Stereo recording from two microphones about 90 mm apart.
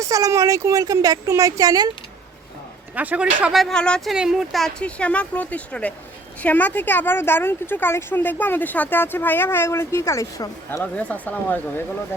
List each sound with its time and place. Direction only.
0.0 s speech: 40° right (ahead or behind)
2.9 s a man's voice: 15° right (ahead or behind)
3.5 s speech: 5° left (ahead or behind)
4.1 s speech: 5° right (ahead or behind)
4.8 s speech: 15° left (ahead or behind); by 10.5 s 40° left (ahead or behind)
10.9 s speech: 15° left (ahead or behind)